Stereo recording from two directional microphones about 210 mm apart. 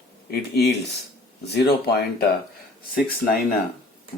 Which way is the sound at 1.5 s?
50° left (ahead or behind).